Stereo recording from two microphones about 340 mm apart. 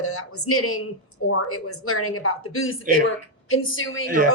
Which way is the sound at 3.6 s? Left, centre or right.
Left.